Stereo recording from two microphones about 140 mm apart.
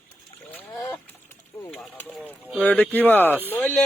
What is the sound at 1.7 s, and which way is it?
Speech, 10° left (ahead or behind).